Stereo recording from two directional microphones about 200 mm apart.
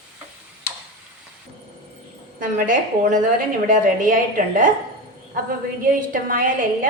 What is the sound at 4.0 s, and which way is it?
Speech, 40° right (ahead or behind).